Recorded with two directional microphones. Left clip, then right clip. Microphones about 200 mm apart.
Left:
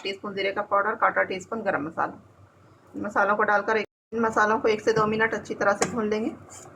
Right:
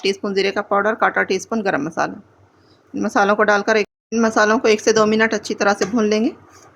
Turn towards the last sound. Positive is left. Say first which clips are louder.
# right 7 dB
turn(degrees=-60)  # may be behind; listen again after turning